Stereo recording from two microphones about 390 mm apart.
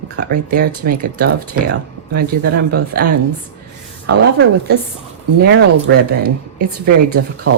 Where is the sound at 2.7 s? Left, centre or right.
Right.